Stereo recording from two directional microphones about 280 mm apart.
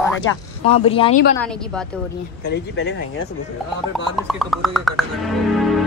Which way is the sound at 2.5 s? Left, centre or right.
Left.